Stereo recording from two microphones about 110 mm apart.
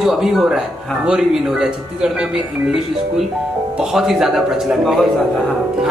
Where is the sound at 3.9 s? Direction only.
5° right (ahead or behind).